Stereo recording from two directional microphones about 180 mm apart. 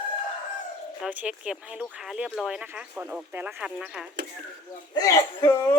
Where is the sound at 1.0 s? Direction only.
5° right (ahead or behind).